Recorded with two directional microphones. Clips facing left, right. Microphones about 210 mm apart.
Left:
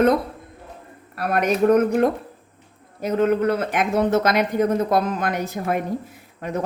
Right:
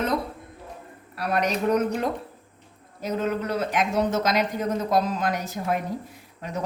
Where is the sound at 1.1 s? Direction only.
55° left (ahead or behind).